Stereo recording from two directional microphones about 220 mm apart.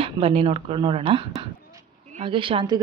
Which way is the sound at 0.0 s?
25° right (ahead or behind).